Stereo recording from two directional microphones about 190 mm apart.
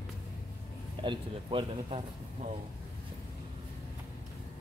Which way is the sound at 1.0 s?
25° right (ahead or behind).